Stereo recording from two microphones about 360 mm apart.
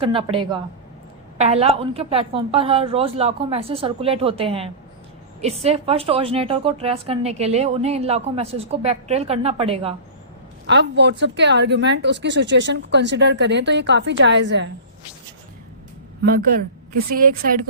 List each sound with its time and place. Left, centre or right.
0.0 s a woman's voice: centre
10.7 s speech: right
16.2 s speech: right